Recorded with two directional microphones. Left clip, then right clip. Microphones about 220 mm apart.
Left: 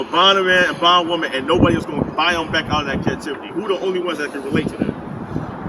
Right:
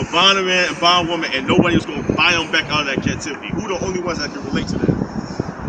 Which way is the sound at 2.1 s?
5° right (ahead or behind).